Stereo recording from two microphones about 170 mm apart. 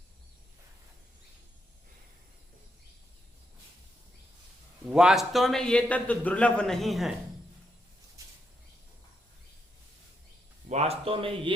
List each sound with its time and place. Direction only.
4.9 s a man's voice: 5° right (ahead or behind)
10.7 s a man's voice: 40° right (ahead or behind)